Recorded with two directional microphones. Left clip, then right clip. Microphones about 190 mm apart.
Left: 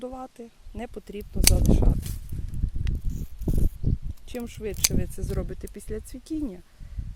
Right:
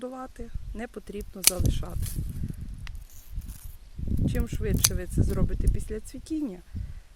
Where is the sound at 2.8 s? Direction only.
20° left (ahead or behind).